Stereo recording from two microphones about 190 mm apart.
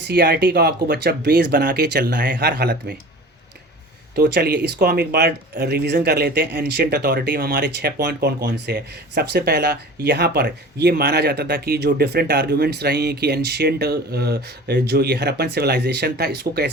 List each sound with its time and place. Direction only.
0.1 s speech: 55° right (ahead or behind)
4.1 s speech: 55° right (ahead or behind)